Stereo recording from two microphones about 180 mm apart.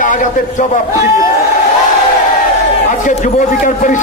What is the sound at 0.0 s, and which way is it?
Speech, 45° left (ahead or behind).